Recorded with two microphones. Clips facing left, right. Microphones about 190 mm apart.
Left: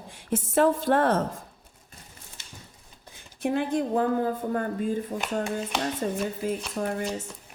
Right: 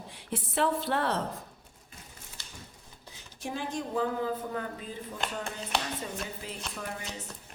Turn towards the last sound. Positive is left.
turn(degrees=50)  # may be behind; listen again after turning